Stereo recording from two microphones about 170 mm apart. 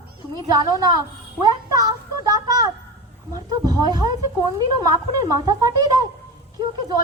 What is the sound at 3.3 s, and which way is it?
A man's voice, 20° right (ahead or behind).